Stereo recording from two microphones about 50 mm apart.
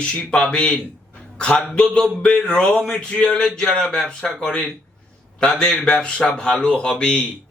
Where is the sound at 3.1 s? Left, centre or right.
Centre.